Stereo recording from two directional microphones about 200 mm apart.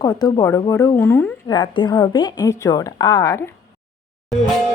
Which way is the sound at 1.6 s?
25° left (ahead or behind).